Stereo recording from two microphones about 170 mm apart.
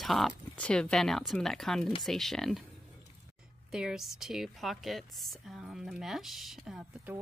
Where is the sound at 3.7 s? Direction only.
5° right (ahead or behind).